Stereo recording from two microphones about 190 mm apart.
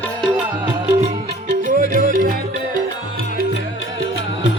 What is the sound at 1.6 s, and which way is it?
Music, 40° right (ahead or behind).